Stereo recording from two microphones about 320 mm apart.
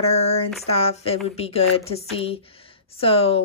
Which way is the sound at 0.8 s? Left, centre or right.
Centre.